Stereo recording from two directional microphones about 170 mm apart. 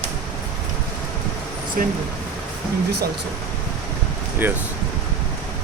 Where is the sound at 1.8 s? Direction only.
55° right (ahead or behind).